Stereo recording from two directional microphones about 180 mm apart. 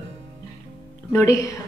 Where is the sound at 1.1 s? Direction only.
20° left (ahead or behind).